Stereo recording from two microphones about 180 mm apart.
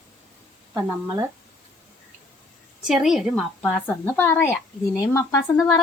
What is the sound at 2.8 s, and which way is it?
Speech, centre (ahead or behind).